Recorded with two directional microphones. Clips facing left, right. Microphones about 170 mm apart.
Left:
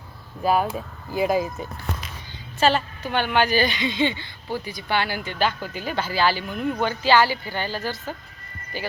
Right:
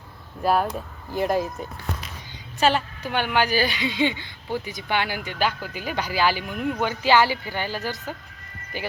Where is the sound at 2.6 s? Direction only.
10° right (ahead or behind).